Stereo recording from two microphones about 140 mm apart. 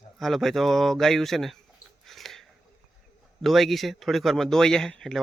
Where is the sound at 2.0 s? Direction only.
Centre (ahead or behind).